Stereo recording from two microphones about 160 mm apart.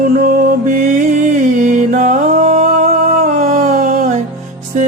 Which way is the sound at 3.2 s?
50° right (ahead or behind).